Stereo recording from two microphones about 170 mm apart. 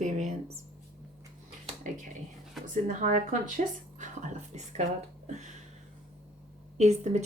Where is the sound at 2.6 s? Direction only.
50° right (ahead or behind).